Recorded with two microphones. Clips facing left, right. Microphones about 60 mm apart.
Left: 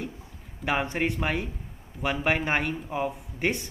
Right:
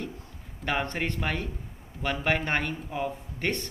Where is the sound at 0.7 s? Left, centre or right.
Centre.